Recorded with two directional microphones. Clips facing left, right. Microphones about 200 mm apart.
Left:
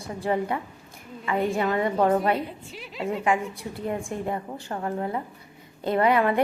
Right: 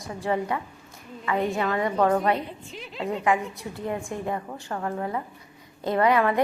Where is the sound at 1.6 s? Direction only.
25° left (ahead or behind).